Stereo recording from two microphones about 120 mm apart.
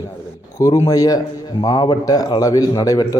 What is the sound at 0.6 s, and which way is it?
A man's voice, 30° left (ahead or behind).